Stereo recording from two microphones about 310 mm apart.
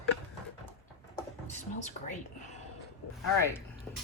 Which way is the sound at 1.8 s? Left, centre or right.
Left.